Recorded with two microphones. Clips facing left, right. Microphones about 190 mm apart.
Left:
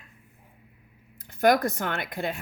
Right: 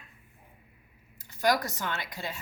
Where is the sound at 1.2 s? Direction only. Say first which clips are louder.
Left 6 dB; 55° left (ahead or behind).